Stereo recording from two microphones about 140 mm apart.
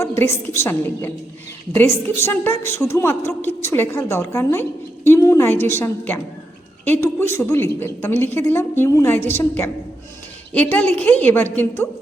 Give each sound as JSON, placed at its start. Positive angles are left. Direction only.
{"t": 0.0, "sound": "a woman's voice", "side_deg": 20}